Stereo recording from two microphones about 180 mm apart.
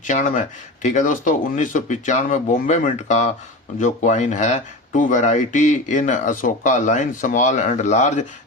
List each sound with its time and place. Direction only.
0.1 s speech: 45° left (ahead or behind)